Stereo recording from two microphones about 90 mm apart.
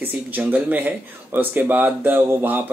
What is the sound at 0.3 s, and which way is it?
Speech, 20° right (ahead or behind).